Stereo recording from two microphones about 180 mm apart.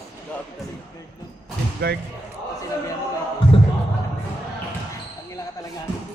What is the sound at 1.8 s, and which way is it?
Slam, 60° right (ahead or behind).